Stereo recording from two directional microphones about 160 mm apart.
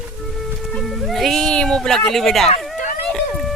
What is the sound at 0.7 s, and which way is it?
Music, centre (ahead or behind).